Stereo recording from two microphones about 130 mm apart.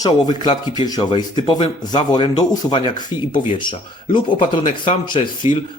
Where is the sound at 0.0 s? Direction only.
35° left (ahead or behind).